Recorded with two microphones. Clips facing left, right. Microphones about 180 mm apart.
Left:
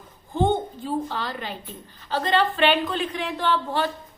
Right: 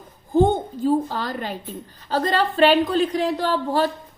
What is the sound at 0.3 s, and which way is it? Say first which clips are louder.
A woman's voice: right 5 dB; 40° right (ahead or behind).